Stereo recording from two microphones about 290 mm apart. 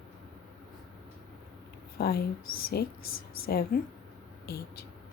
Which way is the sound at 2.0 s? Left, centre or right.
Left.